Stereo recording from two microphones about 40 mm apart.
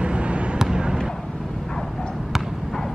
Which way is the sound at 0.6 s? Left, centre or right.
Centre.